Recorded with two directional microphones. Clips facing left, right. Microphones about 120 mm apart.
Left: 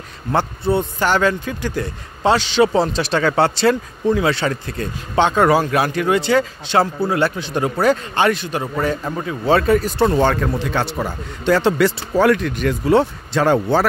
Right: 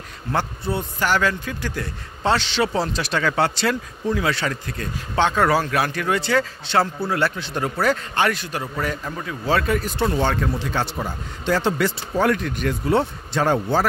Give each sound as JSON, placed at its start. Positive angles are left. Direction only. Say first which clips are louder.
{"t": 0.3, "sound": "a man's voice", "louder": "left 6 dB", "side_deg": 25}
{"t": 10.0, "sound": "a man's voice", "louder": "left 4 dB", "side_deg": 55}